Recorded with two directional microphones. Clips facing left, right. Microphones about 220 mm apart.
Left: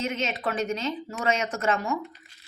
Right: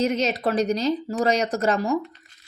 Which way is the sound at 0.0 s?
40° right (ahead or behind).